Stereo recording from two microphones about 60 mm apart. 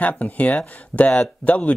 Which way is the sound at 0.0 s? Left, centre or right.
Left.